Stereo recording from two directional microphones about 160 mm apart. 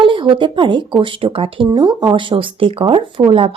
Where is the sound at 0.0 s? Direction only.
30° right (ahead or behind).